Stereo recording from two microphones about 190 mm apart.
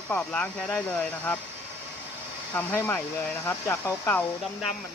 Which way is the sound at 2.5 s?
10° left (ahead or behind).